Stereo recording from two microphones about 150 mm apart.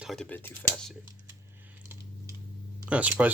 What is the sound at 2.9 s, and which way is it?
Speech, 10° right (ahead or behind).